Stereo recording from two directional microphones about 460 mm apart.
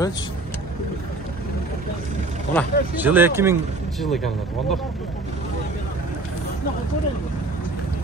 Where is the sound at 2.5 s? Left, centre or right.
Centre.